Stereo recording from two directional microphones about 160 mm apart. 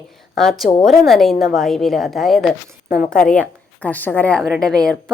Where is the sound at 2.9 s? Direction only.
60° left (ahead or behind).